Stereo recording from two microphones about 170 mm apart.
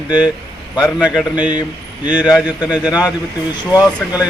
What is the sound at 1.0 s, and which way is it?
Speech, 5° right (ahead or behind).